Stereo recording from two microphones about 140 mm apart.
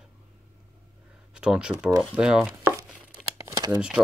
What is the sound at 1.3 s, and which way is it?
Speech, 5° right (ahead or behind).